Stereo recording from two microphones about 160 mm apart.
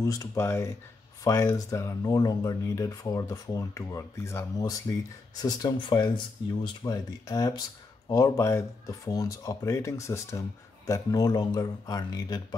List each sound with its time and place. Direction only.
0.0 s speech: 20° left (ahead or behind)